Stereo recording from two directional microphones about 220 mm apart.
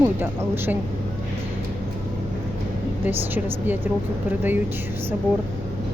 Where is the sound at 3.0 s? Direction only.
10° right (ahead or behind).